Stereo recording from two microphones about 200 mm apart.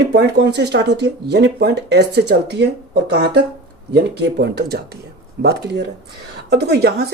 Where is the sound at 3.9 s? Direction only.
55° right (ahead or behind).